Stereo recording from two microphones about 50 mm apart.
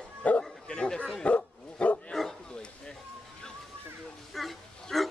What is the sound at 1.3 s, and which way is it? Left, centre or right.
Dog, left.